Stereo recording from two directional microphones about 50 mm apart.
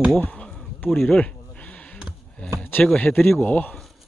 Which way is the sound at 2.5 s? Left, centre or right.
Left.